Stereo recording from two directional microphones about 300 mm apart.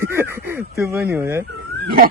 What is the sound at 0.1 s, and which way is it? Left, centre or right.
Speech, centre.